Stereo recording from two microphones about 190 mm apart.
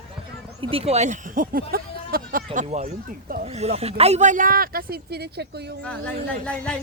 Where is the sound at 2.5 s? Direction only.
35° right (ahead or behind); by 5.6 s 60° right (ahead or behind).